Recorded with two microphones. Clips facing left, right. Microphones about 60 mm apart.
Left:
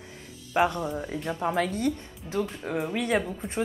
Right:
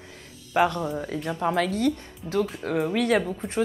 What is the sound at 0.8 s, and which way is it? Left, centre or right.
Speech, centre.